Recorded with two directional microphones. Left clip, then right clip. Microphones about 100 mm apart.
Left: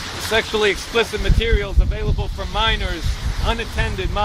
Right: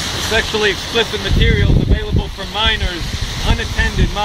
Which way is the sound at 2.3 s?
20° left (ahead or behind).